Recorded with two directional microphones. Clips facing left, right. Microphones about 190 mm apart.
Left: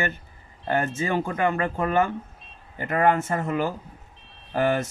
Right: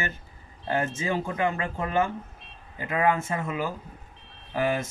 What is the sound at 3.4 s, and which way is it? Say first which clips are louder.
Speech: left 4 dB; 55° left (ahead or behind).